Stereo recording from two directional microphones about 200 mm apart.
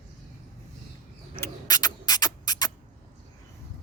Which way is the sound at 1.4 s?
20° left (ahead or behind).